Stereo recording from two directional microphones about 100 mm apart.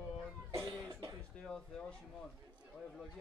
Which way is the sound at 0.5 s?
35° right (ahead or behind).